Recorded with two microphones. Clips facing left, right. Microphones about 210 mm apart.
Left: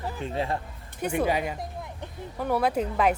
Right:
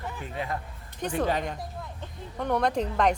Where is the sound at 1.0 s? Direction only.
10° left (ahead or behind).